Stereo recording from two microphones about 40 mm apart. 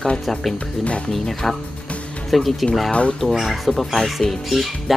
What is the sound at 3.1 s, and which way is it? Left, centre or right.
Speech, centre.